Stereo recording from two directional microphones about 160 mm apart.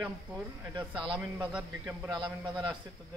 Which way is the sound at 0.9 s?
30° right (ahead or behind).